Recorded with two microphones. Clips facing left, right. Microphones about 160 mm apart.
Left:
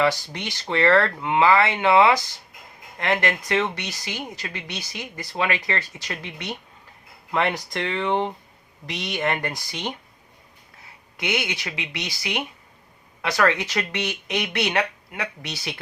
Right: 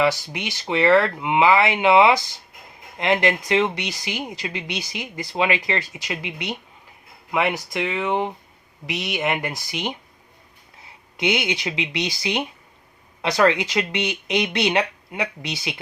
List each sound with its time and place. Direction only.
0.0 s speech: 10° right (ahead or behind)
11.2 s speech: 20° right (ahead or behind)